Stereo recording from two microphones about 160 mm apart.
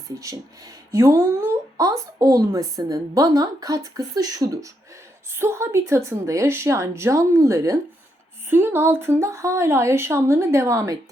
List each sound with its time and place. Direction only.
0.2 s speech: 20° right (ahead or behind)